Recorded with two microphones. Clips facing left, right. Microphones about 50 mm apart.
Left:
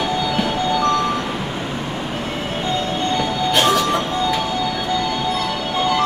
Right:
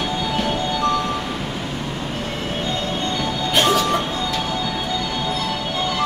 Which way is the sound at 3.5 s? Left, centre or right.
Centre.